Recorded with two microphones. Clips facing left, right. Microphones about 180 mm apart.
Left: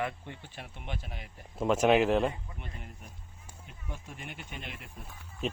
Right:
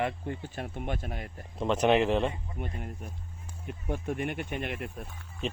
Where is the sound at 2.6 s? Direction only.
45° right (ahead or behind).